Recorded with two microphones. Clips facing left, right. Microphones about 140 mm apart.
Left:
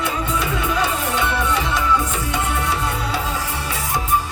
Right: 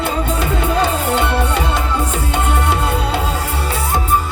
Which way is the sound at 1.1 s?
60° right (ahead or behind).